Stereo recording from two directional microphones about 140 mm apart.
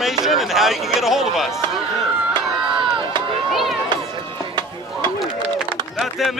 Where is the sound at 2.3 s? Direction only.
35° right (ahead or behind).